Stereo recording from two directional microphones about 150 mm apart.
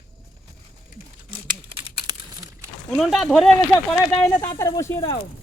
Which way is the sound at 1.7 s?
30° right (ahead or behind).